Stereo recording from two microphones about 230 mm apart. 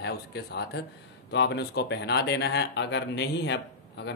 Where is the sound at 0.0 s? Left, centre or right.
Left.